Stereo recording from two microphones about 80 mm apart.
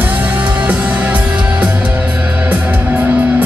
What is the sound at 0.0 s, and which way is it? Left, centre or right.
Music, right.